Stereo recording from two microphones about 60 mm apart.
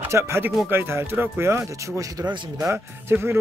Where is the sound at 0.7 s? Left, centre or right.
Right.